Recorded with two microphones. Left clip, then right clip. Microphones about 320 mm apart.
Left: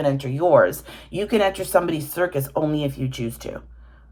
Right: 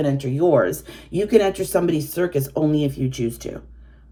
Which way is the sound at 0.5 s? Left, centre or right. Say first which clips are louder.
Left 3 dB; centre.